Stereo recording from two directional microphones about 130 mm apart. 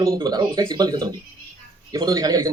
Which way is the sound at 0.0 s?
30° right (ahead or behind).